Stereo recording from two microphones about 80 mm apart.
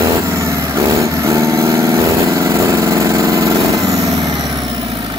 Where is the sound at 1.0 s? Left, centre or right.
Right.